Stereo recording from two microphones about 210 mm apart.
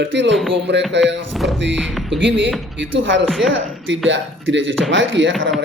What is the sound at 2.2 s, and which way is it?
Speech, 55° right (ahead or behind).